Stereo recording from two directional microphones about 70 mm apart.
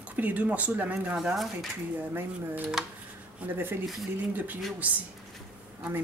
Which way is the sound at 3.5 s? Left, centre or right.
Right.